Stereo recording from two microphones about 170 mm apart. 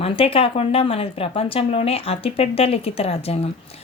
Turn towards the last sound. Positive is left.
turn(degrees=35)  # may be behind; listen again after turning